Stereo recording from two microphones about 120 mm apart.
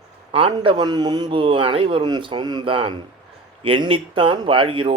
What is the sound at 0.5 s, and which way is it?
Speech, 40° right (ahead or behind).